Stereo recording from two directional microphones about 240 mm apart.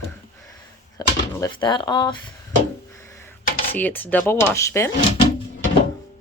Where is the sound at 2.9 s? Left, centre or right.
Centre.